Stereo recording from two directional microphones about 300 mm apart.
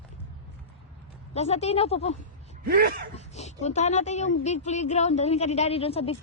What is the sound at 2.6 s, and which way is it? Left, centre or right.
Speech, right.